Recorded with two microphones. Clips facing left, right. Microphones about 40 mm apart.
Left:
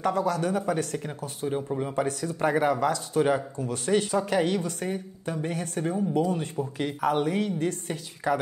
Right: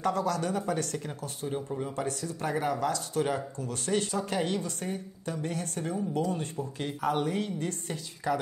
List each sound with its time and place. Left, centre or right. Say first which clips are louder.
0.0 s speech: left 3 dB; left
6.3 s speech: left 4 dB; left